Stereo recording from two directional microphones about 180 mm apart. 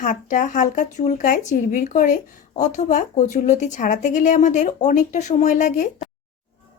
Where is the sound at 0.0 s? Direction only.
45° left (ahead or behind).